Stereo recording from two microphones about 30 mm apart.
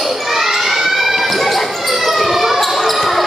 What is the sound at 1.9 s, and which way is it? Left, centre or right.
Siren, centre.